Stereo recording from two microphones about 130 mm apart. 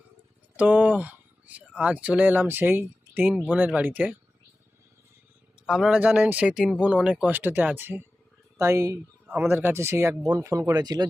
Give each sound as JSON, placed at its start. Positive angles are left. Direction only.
{"t": 0.5, "sound": "a sound", "side_deg": -10}
{"t": 1.8, "sound": "speech", "side_deg": -10}
{"t": 5.6, "sound": "speech", "side_deg": -5}